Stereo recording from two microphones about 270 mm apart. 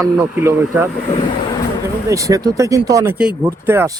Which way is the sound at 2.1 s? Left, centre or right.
Centre.